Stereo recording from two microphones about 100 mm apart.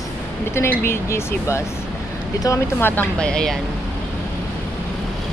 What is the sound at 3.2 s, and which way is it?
Speech, 10° left (ahead or behind).